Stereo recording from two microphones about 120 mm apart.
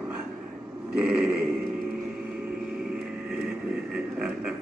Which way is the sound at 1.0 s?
10° right (ahead or behind).